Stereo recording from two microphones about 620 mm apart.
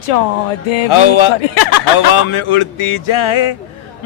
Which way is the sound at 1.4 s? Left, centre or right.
Left.